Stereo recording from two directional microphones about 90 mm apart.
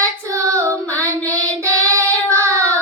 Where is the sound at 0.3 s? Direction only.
35° right (ahead or behind).